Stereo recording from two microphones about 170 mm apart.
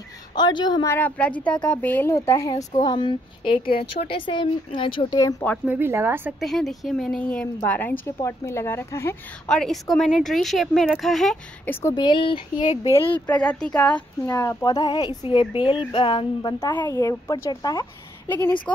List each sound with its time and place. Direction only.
0.3 s speech: 25° left (ahead or behind)
0.9 s a woman's voice: 10° left (ahead or behind); by 5.3 s 25° left (ahead or behind)
5.7 s speech: 15° right (ahead or behind)
6.4 s a woman's voice: centre (ahead or behind)
9.5 s speech: centre (ahead or behind)
11.9 s speech: 25° left (ahead or behind)
13.3 s a woman's voice: 5° left (ahead or behind)